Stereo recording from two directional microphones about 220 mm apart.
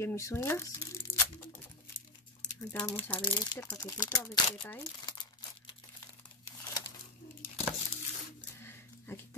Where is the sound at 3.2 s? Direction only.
20° left (ahead or behind).